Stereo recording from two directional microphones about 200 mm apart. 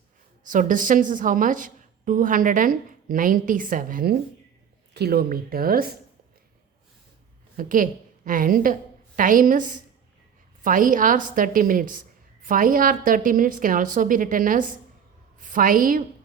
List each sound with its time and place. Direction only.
0.4 s a woman's voice: 40° right (ahead or behind)
7.5 s a woman's voice: 40° right (ahead or behind)